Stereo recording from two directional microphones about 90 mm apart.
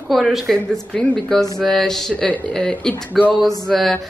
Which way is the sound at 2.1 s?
15° left (ahead or behind).